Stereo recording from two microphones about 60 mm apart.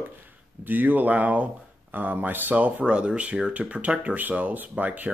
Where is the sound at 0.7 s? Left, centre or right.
Right.